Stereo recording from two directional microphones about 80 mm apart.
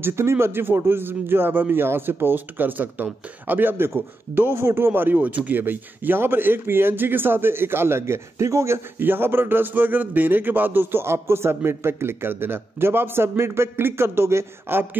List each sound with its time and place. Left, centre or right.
0.0 s speech: right